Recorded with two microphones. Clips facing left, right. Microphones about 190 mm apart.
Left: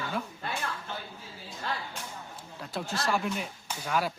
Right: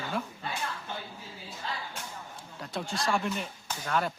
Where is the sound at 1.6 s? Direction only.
65° left (ahead or behind).